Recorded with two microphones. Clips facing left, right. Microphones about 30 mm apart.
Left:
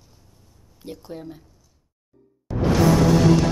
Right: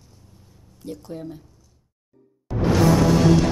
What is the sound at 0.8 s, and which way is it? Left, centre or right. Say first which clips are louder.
Speech: right 2 dB; centre.